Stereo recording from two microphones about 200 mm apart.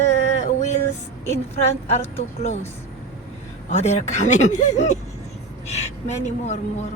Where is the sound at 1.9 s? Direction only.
30° left (ahead or behind).